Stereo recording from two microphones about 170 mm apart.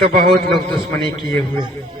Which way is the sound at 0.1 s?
65° right (ahead or behind).